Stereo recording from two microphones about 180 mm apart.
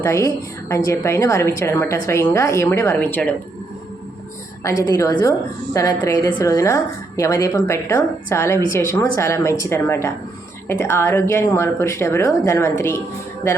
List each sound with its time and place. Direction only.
0.0 s a woman's voice: 15° left (ahead or behind)
4.6 s a woman's voice: 15° left (ahead or behind)